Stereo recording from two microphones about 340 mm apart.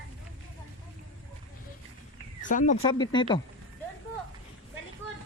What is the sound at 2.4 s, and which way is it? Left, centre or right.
Speech, left.